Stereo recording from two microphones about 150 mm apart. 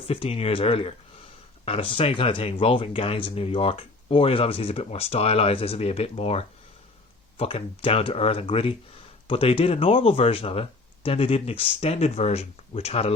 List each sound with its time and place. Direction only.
0.1 s speech: 40° left (ahead or behind)